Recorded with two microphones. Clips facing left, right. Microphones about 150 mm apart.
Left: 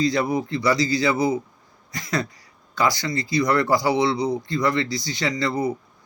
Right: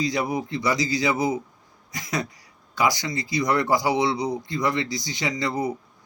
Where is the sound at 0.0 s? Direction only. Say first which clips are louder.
Left 4 dB; 15° right (ahead or behind).